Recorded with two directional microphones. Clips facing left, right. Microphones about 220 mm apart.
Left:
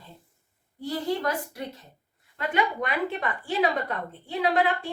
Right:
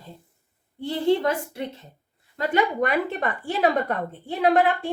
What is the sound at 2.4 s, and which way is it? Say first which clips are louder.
A woman's voice: right 5 dB; 45° right (ahead or behind).